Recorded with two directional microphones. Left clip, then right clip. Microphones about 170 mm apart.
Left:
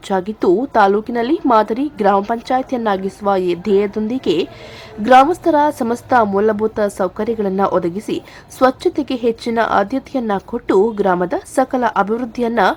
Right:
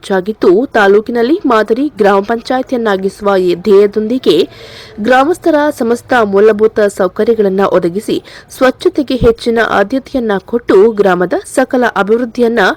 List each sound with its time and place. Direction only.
0.1 s a woman's voice: 20° right (ahead or behind)